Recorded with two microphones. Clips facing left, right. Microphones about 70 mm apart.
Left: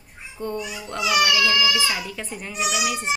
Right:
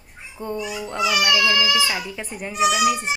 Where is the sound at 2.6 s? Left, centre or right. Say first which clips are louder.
Right 6 dB; centre.